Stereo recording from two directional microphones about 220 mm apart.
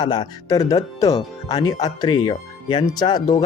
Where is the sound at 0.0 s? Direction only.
20° left (ahead or behind).